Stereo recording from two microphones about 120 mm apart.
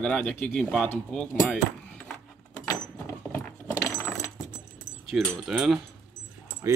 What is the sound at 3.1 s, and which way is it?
Keys jangling, 20° left (ahead or behind).